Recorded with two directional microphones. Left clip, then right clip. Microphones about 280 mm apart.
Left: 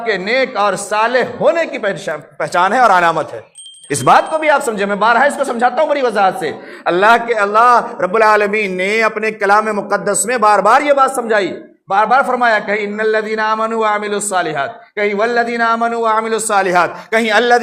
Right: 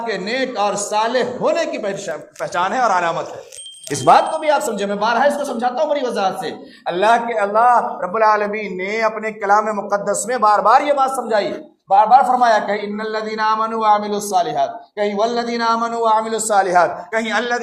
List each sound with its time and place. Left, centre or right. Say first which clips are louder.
0.0 s a man's voice: left 6 dB; left